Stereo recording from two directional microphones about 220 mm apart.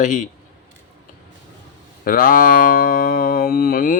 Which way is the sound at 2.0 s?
40° left (ahead or behind).